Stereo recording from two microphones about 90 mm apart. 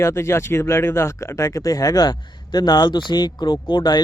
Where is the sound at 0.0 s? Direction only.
30° left (ahead or behind).